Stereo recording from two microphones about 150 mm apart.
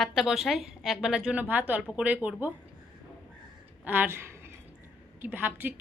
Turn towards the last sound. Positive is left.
turn(degrees=-10)  # may be behind; listen again after turning